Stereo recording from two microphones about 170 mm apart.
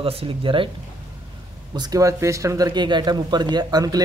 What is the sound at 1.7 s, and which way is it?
Speech, 25° right (ahead or behind).